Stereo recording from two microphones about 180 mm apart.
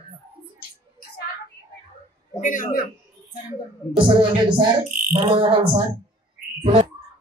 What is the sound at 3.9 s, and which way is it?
A woman's voice, 25° right (ahead or behind).